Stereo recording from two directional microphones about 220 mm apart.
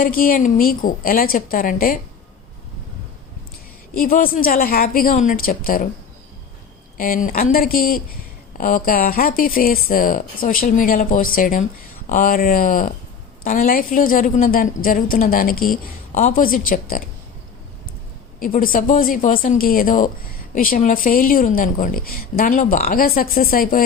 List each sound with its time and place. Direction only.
0.0 s a woman's voice: 40° left (ahead or behind)
3.9 s a woman's voice: 40° left (ahead or behind)
6.9 s a woman's voice: 40° left (ahead or behind)
18.3 s a woman's voice: 40° left (ahead or behind)